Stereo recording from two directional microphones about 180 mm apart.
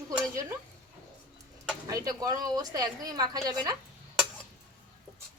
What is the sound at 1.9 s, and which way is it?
A woman's voice, 20° right (ahead or behind).